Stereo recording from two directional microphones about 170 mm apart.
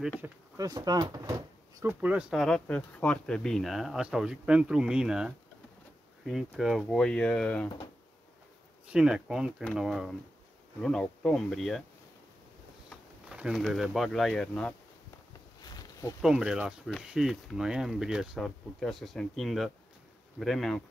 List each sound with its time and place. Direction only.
0.2 s speech: 20° right (ahead or behind)
2.0 s speech: 10° right (ahead or behind)
8.8 s speech: 5° right (ahead or behind)
12.9 s speech: 5° right (ahead or behind)
15.6 s a sound: 20° left (ahead or behind)
16.2 s speech: 5° right (ahead or behind)